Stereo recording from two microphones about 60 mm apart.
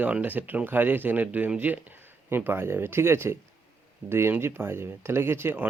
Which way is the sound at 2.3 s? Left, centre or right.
Right.